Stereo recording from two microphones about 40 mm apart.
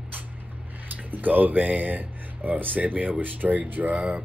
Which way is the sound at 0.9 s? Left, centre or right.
Right.